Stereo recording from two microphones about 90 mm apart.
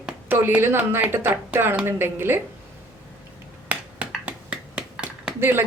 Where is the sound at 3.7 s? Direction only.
15° right (ahead or behind).